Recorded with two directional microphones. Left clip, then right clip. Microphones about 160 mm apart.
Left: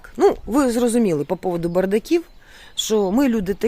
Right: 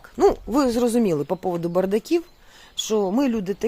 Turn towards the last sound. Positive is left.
turn(degrees=30)  # may be behind; listen again after turning